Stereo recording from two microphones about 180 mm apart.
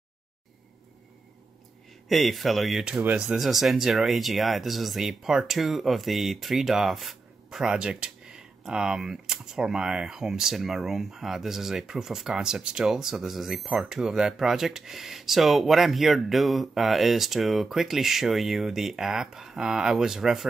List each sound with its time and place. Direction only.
2.0 s speech: centre (ahead or behind)